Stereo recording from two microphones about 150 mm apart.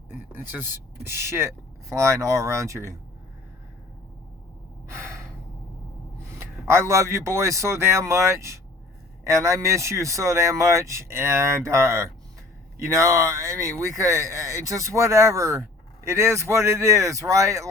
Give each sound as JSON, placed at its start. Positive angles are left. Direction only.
{"t": 0.1, "sound": "speech", "side_deg": -15}
{"t": 4.9, "sound": "gasp", "side_deg": -15}
{"t": 6.4, "sound": "speech", "side_deg": -15}